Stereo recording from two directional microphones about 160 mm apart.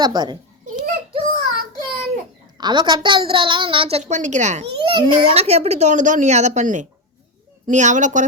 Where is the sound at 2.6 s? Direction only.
30° right (ahead or behind).